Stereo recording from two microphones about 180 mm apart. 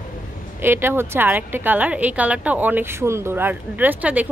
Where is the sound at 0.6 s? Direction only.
10° right (ahead or behind).